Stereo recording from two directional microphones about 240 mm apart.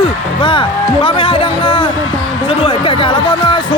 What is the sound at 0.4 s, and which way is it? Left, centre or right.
Speech, left.